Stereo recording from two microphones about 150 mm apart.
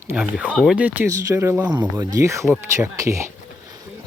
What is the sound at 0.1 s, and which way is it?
Speech, 10° right (ahead or behind).